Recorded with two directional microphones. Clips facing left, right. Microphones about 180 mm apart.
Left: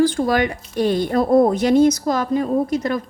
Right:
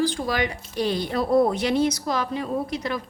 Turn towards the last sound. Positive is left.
turn(degrees=45)  # may be behind; listen again after turning